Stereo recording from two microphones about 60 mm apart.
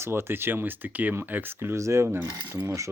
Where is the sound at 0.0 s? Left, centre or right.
Right.